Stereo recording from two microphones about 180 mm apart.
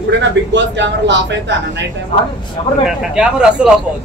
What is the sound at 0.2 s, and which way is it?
A man's voice, 80° right.